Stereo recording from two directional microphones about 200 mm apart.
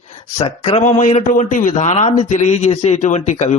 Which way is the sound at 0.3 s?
25° left (ahead or behind).